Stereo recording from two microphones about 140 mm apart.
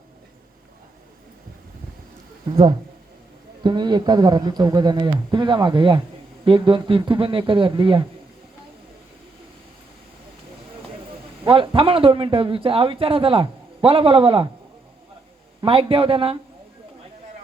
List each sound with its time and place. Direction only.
3.6 s speech: 35° right (ahead or behind)
11.4 s speech: 40° right (ahead or behind)
15.6 s speech: 40° right (ahead or behind)